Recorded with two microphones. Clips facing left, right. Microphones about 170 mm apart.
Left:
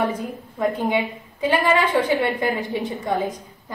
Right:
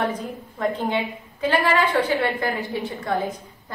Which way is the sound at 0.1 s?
10° left (ahead or behind).